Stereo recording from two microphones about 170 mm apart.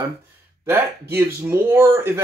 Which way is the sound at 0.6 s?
15° right (ahead or behind).